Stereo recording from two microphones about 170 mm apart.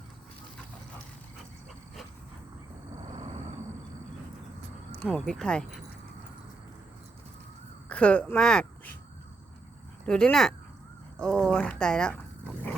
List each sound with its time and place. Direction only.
3.0 s vehicle: 40° right (ahead or behind)
4.9 s speech: 5° left (ahead or behind)
7.9 s speech: 5° left (ahead or behind)
10.1 s speech: 5° left (ahead or behind)